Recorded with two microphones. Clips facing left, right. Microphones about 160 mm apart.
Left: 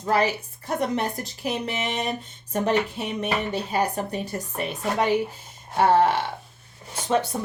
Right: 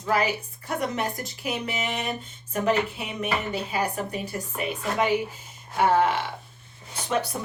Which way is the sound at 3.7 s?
40° left (ahead or behind).